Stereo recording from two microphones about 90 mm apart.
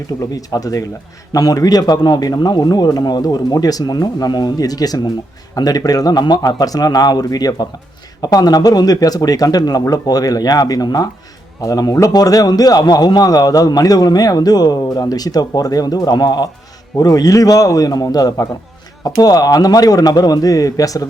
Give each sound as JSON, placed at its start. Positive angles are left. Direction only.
{"t": 0.1, "sound": "a man's voice", "side_deg": 50}